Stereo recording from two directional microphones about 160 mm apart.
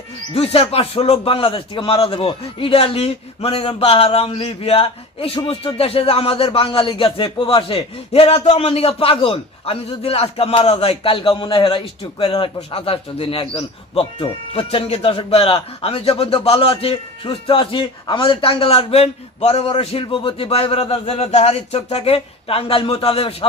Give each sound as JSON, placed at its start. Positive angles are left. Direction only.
{"t": 0.3, "sound": "a man's voice", "side_deg": 40}